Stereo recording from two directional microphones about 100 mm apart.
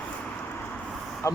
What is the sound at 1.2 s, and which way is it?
Speech, 30° left (ahead or behind).